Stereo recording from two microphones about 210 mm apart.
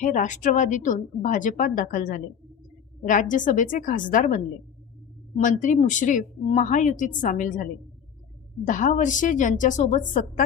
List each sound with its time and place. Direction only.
0.0 s a woman's voice: 40° left (ahead or behind)
5.4 s a woman's voice: 35° left (ahead or behind)